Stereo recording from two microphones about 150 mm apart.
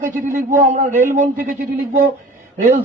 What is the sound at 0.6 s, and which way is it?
A man's voice, 60° right (ahead or behind).